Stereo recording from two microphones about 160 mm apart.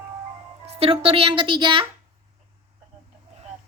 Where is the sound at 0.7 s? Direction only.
35° right (ahead or behind).